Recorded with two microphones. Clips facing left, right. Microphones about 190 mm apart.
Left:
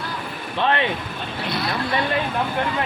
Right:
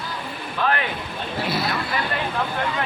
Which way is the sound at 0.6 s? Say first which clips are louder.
Left 2 dB; 25° left (ahead or behind).